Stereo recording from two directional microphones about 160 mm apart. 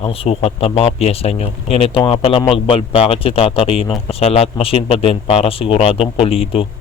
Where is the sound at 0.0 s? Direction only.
35° left (ahead or behind).